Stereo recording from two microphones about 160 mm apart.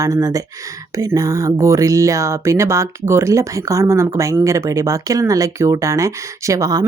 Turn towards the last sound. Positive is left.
turn(degrees=-20)  # may be behind; listen again after turning